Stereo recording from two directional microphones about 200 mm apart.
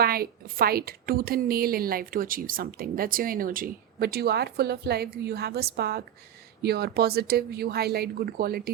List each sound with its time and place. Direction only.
0.0 s a woman's voice: 50° right (ahead or behind)